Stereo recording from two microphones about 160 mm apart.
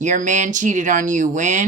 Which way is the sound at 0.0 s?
50° right (ahead or behind).